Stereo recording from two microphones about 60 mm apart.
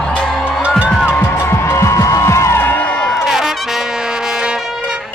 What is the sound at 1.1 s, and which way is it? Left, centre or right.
Music, left.